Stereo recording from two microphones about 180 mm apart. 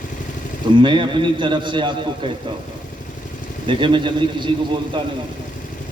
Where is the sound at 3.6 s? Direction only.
25° right (ahead or behind).